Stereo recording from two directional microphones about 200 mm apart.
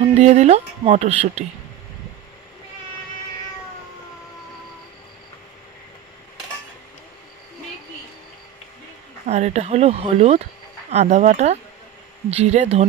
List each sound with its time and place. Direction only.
0.0 s speech: 35° right (ahead or behind)
9.2 s speech: 35° right (ahead or behind)